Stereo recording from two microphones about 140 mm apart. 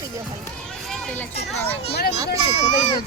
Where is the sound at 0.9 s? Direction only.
10° left (ahead or behind).